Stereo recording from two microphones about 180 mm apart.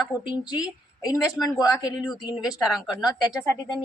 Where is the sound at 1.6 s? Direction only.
20° left (ahead or behind).